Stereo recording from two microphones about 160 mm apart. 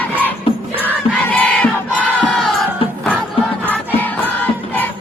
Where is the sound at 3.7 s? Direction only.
10° left (ahead or behind).